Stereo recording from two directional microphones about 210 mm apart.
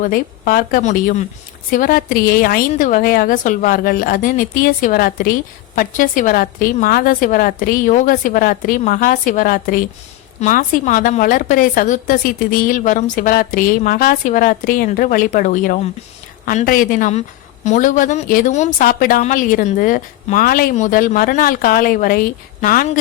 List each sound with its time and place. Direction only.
0.0 s a woman's voice: 40° left (ahead or behind)